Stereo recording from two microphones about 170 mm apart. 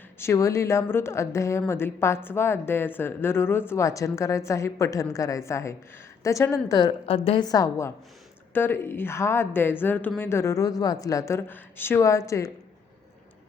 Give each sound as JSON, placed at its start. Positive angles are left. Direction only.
{"t": 0.2, "sound": "a woman's voice", "side_deg": 15}
{"t": 7.0, "sound": "a woman's voice", "side_deg": 35}